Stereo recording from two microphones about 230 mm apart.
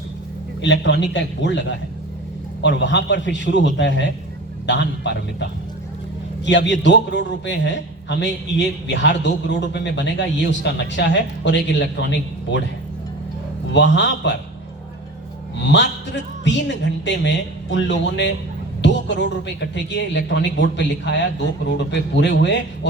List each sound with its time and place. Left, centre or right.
0.6 s a man's voice: left
13.7 s a man's voice: left
16.4 s a man's voice: left